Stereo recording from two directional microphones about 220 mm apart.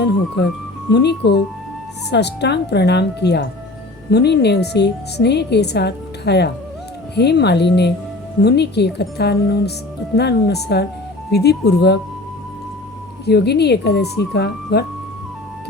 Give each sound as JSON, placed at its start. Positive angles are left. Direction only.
{"t": 0.9, "sound": "a woman's voice", "side_deg": 50}
{"t": 13.2, "sound": "a woman's voice", "side_deg": 50}